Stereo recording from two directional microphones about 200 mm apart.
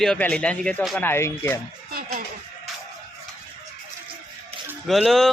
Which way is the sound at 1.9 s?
50° right (ahead or behind).